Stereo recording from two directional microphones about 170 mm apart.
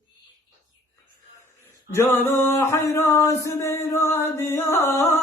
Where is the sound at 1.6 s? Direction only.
15° left (ahead or behind).